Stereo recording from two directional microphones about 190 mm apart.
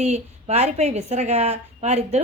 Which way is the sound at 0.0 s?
35° right (ahead or behind).